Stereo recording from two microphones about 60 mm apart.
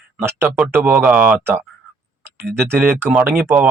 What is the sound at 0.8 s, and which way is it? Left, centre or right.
Speech, right.